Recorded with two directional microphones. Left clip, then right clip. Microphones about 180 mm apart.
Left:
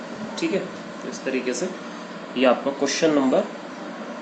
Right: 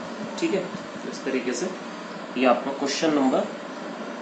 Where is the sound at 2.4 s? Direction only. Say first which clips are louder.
Left 2 dB; 60° left (ahead or behind).